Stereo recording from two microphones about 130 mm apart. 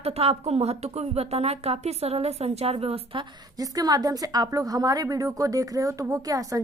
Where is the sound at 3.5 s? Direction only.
30° right (ahead or behind).